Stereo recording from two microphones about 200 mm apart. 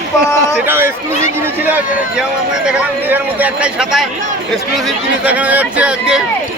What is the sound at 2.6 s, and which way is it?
A man's voice, 5° right (ahead or behind).